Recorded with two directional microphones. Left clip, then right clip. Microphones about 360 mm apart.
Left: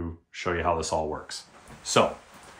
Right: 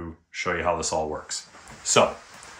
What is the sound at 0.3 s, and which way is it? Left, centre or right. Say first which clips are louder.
Speech: right 2 dB; centre.